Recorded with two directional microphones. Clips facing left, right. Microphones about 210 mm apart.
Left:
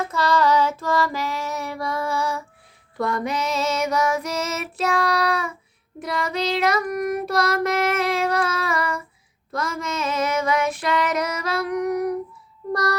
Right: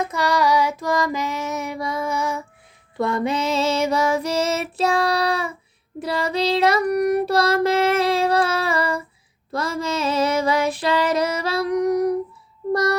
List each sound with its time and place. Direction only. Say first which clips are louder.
0.0 s child singing: even; 15° right (ahead or behind); by 9.0 s 30° right (ahead or behind)
9.5 s female singing: right 3 dB; 35° right (ahead or behind)
12.7 s a sound: right 4 dB; 25° right (ahead or behind)